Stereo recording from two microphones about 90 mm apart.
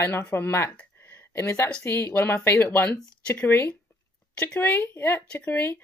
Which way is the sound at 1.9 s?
30° left (ahead or behind).